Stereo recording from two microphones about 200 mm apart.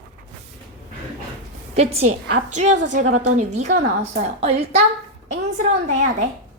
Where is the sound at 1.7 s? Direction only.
30° right (ahead or behind).